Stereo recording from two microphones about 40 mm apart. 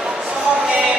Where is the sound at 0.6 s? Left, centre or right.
Centre.